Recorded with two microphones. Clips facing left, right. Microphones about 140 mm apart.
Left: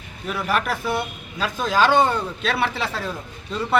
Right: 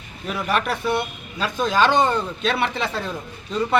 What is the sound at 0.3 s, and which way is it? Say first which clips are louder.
Speech: even; centre (ahead or behind).